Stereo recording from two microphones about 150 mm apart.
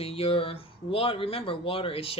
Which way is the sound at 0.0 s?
40° left (ahead or behind).